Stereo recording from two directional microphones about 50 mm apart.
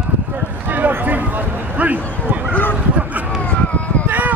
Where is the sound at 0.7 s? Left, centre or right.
Right.